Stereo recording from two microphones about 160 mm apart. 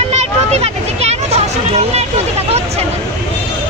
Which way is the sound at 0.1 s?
45° right (ahead or behind).